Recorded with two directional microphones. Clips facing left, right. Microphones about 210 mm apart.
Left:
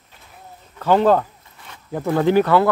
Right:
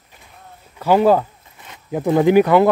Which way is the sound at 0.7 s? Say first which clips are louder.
Right 1 dB; 10° right (ahead or behind).